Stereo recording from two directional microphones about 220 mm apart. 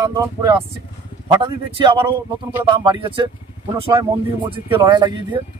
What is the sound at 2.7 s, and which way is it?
Speech, 20° right (ahead or behind).